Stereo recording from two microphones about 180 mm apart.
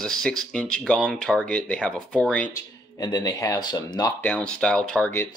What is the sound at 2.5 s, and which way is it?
Speech, 20° left (ahead or behind).